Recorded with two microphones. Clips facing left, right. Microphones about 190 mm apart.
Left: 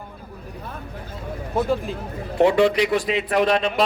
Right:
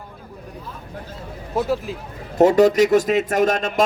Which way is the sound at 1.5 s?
5° right (ahead or behind).